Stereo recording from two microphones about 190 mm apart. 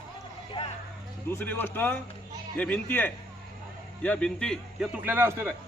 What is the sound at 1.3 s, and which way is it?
A man's voice, 10° left (ahead or behind).